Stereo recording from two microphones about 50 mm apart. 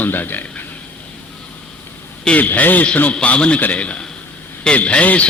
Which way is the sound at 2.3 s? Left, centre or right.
Left.